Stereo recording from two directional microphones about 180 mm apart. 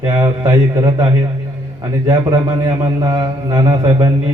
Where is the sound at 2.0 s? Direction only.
20° right (ahead or behind).